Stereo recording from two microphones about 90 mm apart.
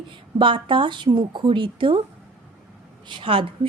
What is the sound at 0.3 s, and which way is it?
Speech, 70° right (ahead or behind).